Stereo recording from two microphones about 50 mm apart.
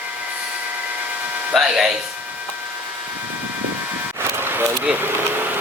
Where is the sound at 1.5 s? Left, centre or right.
Centre.